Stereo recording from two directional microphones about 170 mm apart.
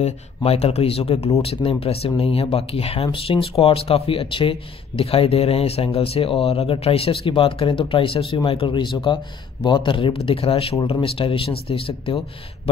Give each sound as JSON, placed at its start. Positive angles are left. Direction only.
{"t": 0.0, "sound": "speech", "side_deg": 40}